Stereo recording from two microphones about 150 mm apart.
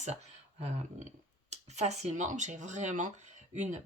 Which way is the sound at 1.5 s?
50° right (ahead or behind).